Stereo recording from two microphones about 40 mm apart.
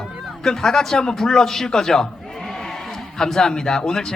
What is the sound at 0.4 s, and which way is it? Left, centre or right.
Speech, centre.